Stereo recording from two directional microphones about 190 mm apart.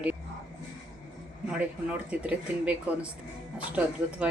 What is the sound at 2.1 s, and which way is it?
Speech, 5° right (ahead or behind).